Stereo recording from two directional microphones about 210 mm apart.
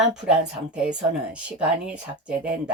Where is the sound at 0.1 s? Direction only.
5° right (ahead or behind).